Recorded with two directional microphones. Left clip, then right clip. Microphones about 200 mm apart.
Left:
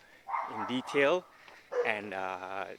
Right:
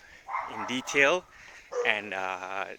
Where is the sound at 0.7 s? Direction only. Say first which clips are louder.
Right 4 dB; 5° left (ahead or behind).